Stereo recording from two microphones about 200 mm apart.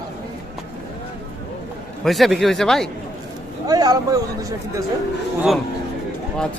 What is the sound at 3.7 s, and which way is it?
Speech, 20° right (ahead or behind).